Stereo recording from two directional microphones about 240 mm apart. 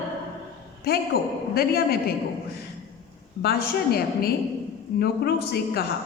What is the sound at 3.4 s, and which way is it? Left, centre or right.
A woman's voice, left.